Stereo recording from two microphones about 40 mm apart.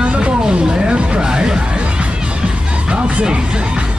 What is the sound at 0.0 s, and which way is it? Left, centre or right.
Music, right.